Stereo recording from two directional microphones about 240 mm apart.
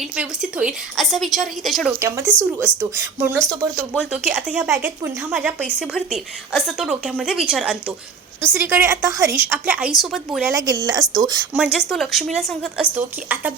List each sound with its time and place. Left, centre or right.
0.2 s a woman's voice: centre
2.0 s speech: centre
2.7 s a woman's voice: centre
10.5 s speech: centre
11.5 s a woman's voice: centre